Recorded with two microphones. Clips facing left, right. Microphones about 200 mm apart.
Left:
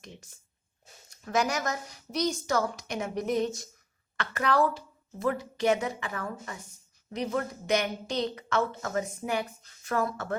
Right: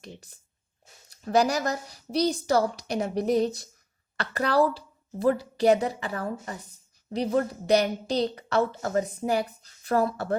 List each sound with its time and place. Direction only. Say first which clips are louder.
0.0 s a woman's voice: right 4 dB; 35° right (ahead or behind)